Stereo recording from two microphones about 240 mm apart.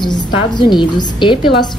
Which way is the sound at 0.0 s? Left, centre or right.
Centre.